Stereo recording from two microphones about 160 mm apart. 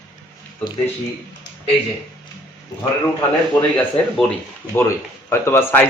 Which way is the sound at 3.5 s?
5° left (ahead or behind).